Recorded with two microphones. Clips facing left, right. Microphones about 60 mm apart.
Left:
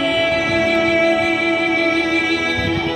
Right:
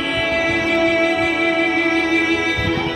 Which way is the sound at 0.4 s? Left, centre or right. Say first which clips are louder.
Left 1 dB; right.